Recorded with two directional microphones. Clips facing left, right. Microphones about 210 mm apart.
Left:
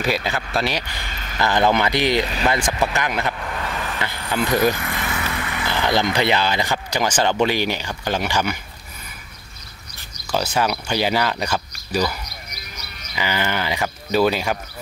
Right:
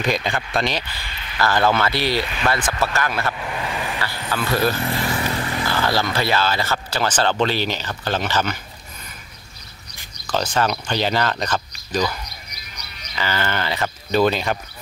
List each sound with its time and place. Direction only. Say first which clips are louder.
0.0 s speech: even; 5° left (ahead or behind)
1.1 s a sound: left 3 dB; 45° left (ahead or behind)
1.4 s speech: left 1 dB; 20° left (ahead or behind)
3.3 s vehicle: right 1 dB; 10° right (ahead or behind)
4.0 s speech: left 2 dB; 20° left (ahead or behind)
4.7 s vehicle: right 4 dB; 35° right (ahead or behind)
5.7 s speech: left 3 dB; 20° left (ahead or behind)
10.2 s speech: even; 10° left (ahead or behind)